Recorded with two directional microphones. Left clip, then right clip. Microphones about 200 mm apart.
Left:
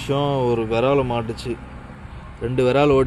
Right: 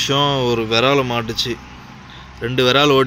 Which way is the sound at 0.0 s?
5° right (ahead or behind).